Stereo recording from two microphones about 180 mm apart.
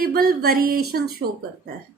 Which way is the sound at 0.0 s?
55° right (ahead or behind).